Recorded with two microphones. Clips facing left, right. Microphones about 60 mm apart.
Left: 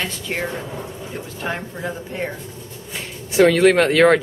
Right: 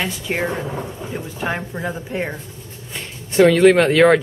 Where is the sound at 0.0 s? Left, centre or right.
Centre.